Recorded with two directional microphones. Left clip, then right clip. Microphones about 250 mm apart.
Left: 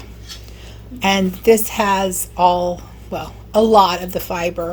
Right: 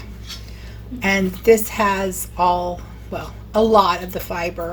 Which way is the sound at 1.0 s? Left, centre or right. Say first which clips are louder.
Left 1 dB; left.